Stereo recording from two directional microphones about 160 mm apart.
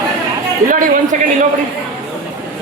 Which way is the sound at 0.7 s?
55° right (ahead or behind).